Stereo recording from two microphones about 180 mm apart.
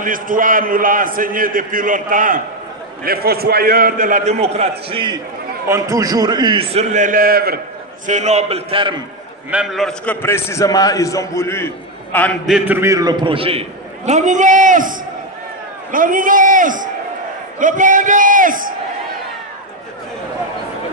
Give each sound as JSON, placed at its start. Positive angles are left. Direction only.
{"t": 0.0, "sound": "a man's voice", "side_deg": -50}
{"t": 8.1, "sound": "a man's voice", "side_deg": -40}
{"t": 9.5, "sound": "a man's voice", "side_deg": -5}
{"t": 10.2, "sound": "a man's voice", "side_deg": 15}
{"t": 12.4, "sound": "a man's voice", "side_deg": -5}